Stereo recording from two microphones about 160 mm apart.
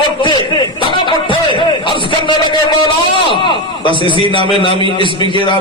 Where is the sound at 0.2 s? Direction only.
30° left (ahead or behind).